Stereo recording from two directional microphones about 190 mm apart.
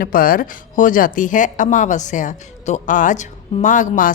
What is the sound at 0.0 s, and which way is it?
Speech, 50° left (ahead or behind).